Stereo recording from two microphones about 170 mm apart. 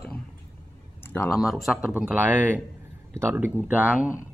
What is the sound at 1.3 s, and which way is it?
A man's voice, centre (ahead or behind).